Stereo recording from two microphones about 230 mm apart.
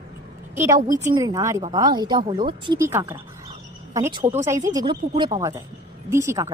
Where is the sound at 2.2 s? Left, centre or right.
Right.